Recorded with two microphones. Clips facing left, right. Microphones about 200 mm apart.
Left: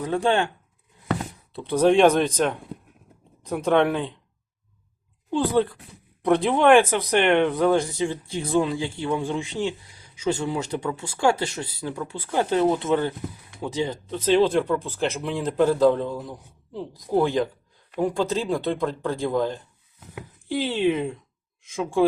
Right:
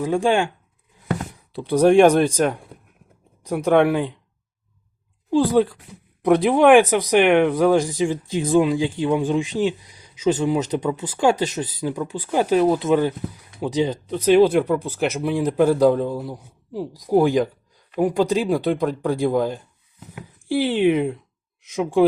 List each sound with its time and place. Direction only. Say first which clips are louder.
0.0 s speech: right 3 dB; 15° right (ahead or behind)
1.6 s speech: right 4 dB; 10° right (ahead or behind)
5.3 s speech: right 4 dB; 15° right (ahead or behind)